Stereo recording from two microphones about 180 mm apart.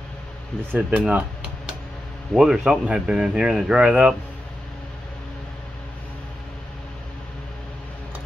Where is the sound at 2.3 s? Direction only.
5° right (ahead or behind).